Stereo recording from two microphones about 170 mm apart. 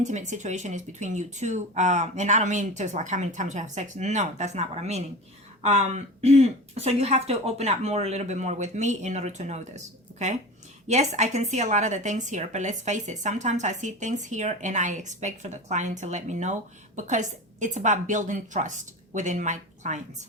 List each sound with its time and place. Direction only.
0.0 s a woman's voice: 45° right (ahead or behind)